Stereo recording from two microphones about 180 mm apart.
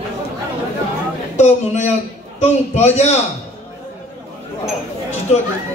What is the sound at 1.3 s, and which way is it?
Speech, 40° left (ahead or behind).